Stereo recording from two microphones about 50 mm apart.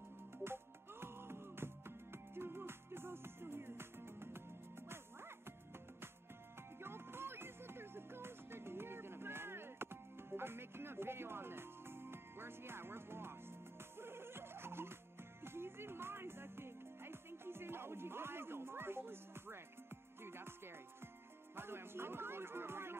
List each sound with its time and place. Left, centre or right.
0.4 s music: right
6.8 s music: right
21.5 s speech: right